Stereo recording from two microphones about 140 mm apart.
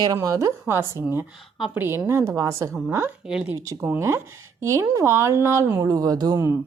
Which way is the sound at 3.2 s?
5° right (ahead or behind).